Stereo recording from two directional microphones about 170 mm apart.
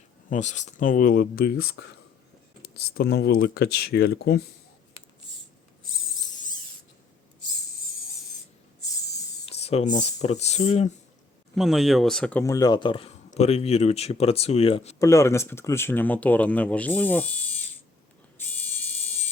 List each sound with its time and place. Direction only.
0.3 s speech: 45° left (ahead or behind); by 1.8 s 60° left (ahead or behind)
2.9 s speech: 70° left (ahead or behind)
9.5 s a sound: 40° left (ahead or behind)
10.2 s speech: 40° left (ahead or behind)
11.5 s speech: centre (ahead or behind)
12.5 s speech: 20° left (ahead or behind); by 14.9 s 35° left (ahead or behind)
14.9 s speech: 20° left (ahead or behind)